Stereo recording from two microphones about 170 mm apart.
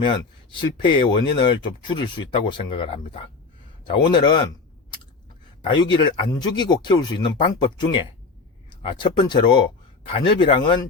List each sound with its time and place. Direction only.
0.6 s speech: 25° left (ahead or behind)
5.6 s speech: 25° left (ahead or behind)